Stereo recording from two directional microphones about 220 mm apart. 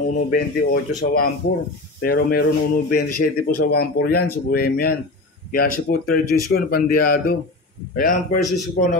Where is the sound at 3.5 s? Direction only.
45° left (ahead or behind).